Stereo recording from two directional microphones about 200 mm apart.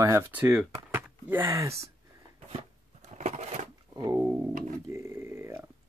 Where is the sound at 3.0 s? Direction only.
35° right (ahead or behind).